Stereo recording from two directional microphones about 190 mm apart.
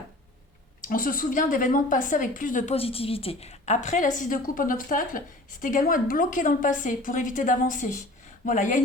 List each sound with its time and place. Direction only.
0.9 s a woman's voice: 45° left (ahead or behind)